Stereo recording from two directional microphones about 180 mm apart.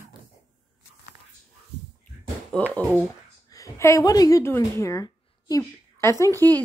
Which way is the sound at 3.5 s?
15° left (ahead or behind).